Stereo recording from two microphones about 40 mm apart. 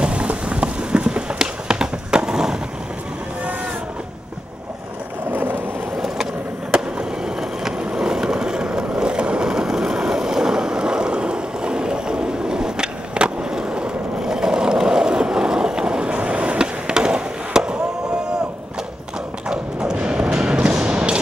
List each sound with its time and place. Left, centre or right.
0.0 s rain on surface: right
1.4 s skateboard: centre
5.3 s vehicle: right
5.9 s vehicle: centre
6.7 s skateboard: right
7.6 s vehicle: centre
16.2 s skateboard: right
19.5 s a sound: centre